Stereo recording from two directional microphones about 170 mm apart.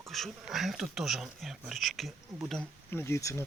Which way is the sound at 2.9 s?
15° left (ahead or behind).